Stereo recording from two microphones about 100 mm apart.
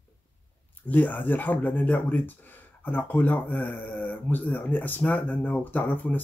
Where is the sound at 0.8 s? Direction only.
15° left (ahead or behind).